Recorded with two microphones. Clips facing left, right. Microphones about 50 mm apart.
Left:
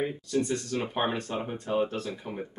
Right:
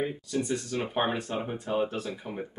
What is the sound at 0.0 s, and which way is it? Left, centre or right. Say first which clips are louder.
Speech: left 2 dB; centre.